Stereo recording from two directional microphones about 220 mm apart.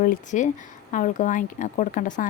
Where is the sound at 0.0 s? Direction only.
35° left (ahead or behind).